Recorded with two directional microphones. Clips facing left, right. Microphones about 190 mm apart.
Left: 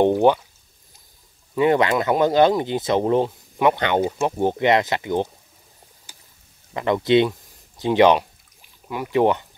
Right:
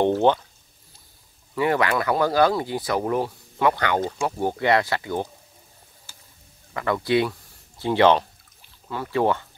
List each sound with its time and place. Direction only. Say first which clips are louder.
0.0 s pour: left 3 dB; 15° left (ahead or behind)
1.5 s speech: left 4 dB; 20° left (ahead or behind)
6.7 s speech: left 4 dB; 20° left (ahead or behind)